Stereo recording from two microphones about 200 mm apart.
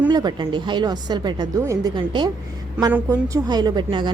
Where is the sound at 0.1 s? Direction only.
20° right (ahead or behind).